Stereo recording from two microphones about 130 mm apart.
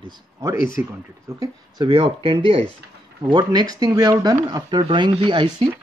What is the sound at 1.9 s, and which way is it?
Speech, 40° right (ahead or behind).